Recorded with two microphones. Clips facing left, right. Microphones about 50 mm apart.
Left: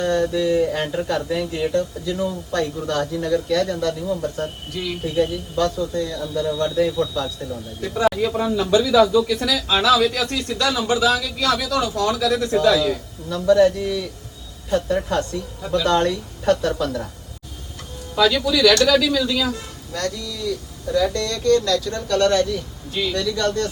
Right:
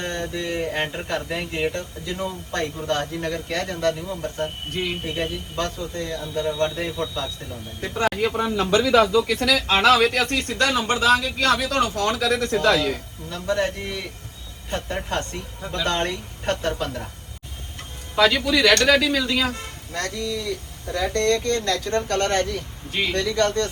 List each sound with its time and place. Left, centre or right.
0.0 s speech: right
18.1 s speech: right